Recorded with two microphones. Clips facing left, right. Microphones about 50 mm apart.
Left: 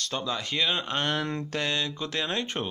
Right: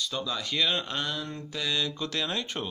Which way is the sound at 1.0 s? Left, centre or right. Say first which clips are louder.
Left 6 dB; left.